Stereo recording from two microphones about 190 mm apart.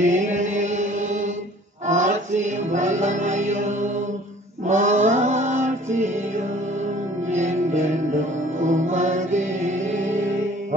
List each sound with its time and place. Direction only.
0.0 s mantra: 40° right (ahead or behind)
4.6 s music: 40° right (ahead or behind)